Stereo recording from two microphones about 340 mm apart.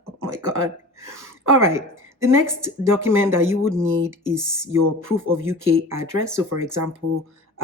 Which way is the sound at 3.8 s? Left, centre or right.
Right.